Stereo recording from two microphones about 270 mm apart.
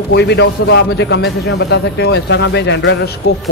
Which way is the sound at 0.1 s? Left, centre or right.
Left.